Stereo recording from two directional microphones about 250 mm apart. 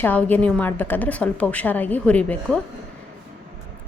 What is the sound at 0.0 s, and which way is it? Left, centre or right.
A woman's voice, centre.